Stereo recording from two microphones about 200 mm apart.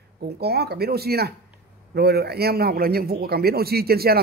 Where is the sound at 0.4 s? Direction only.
50° right (ahead or behind).